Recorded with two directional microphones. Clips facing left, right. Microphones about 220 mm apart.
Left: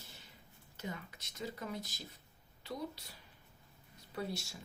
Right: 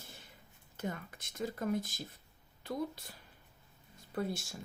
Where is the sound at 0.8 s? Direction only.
50° right (ahead or behind).